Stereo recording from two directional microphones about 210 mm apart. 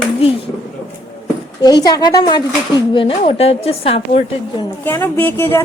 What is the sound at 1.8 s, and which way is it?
A woman's voice, 20° left (ahead or behind).